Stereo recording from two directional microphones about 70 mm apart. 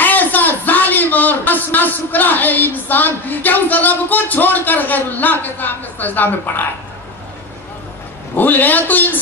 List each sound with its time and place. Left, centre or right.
0.0 s a man's voice: left
8.4 s a man's voice: left